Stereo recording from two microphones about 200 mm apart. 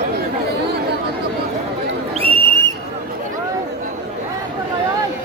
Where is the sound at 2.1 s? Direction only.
25° right (ahead or behind).